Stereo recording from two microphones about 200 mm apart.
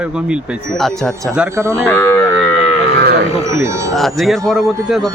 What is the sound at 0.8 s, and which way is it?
Speech, centre (ahead or behind).